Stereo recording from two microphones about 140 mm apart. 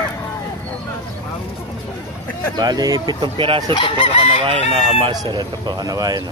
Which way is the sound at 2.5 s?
30° right (ahead or behind).